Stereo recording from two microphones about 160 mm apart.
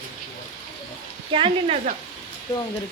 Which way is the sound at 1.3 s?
35° right (ahead or behind).